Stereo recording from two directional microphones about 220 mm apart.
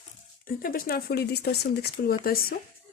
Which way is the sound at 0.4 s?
40° left (ahead or behind).